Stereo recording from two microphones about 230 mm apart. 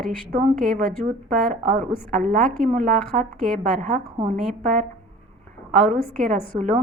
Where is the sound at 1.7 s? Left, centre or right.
Right.